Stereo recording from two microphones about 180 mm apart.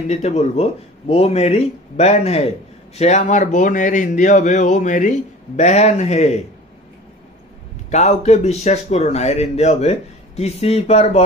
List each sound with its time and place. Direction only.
0.1 s a man's voice: 35° left (ahead or behind)
7.9 s a man's voice: 40° left (ahead or behind)